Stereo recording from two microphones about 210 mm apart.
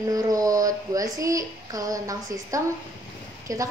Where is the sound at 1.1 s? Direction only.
15° right (ahead or behind).